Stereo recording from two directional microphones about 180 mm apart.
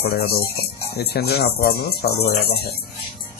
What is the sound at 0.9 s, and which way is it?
A man's voice, 65° left (ahead or behind).